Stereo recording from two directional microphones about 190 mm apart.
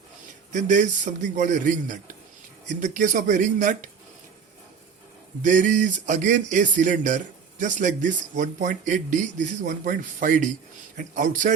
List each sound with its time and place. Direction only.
0.5 s a man's voice: 40° right (ahead or behind)
5.4 s a man's voice: 40° right (ahead or behind)